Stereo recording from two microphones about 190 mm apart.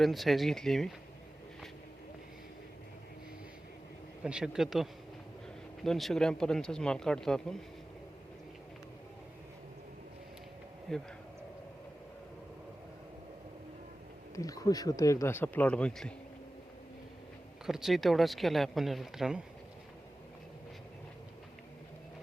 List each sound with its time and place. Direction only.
0.0 s speech: centre (ahead or behind)
4.2 s speech: 5° right (ahead or behind)
10.9 s speech: 5° left (ahead or behind)
14.3 s speech: 20° left (ahead or behind)
17.7 s speech: centre (ahead or behind)